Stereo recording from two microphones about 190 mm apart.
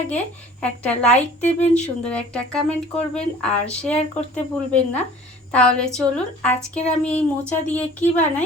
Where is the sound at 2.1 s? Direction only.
5° left (ahead or behind).